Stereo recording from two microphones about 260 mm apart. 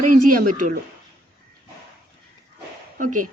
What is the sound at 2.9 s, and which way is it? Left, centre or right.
Speech, right.